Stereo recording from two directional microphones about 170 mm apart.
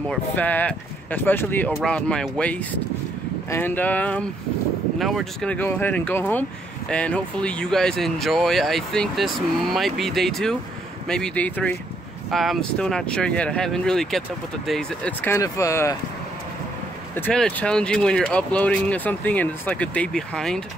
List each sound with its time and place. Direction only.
0.1 s speech: 10° left (ahead or behind)
17.1 s speech: 5° left (ahead or behind)